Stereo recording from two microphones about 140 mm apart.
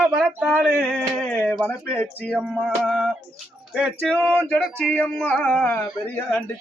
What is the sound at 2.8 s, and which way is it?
Music, centre (ahead or behind).